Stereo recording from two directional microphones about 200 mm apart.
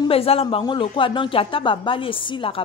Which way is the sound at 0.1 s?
30° left (ahead or behind).